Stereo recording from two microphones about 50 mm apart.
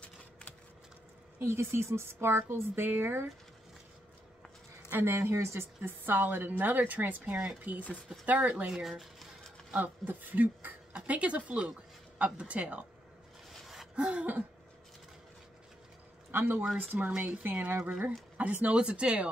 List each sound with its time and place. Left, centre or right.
0.0 s a sound: left
1.4 s a woman's voice: right
5.0 s a woman's voice: right
5.6 s a woman's voice: right
8.6 s speech: centre
9.8 s speech: right
11.0 s speech: right
13.9 s throat clearing: centre
16.3 s a woman's voice: right